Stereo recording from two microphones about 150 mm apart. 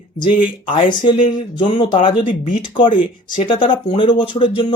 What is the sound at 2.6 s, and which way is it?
Speech, 35° left (ahead or behind).